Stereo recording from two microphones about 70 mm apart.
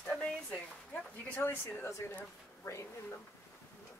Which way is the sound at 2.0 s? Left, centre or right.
Left.